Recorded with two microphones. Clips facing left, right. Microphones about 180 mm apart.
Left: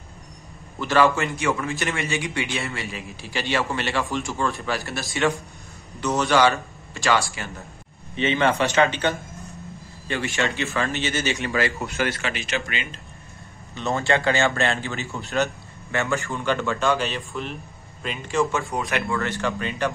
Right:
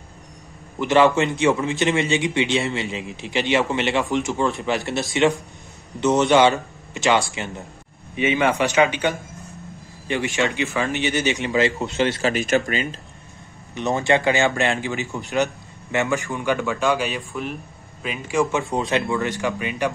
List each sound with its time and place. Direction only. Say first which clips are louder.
0.7 s a man's voice: right 3 dB; 20° right (ahead or behind)
12.2 s speech: right 8 dB; 40° right (ahead or behind)
13.7 s a man's voice: right 3 dB; 20° right (ahead or behind)